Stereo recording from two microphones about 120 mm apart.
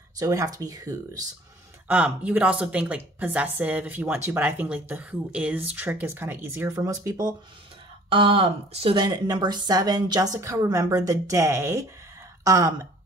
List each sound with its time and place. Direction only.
0.2 s speech: 30° right (ahead or behind)
1.9 s a woman's voice: 10° right (ahead or behind); by 7.3 s 30° right (ahead or behind)
8.1 s speech: 50° right (ahead or behind)
9.0 s a woman's voice: 35° right (ahead or behind)